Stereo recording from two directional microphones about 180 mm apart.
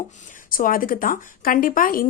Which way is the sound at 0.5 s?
50° left (ahead or behind).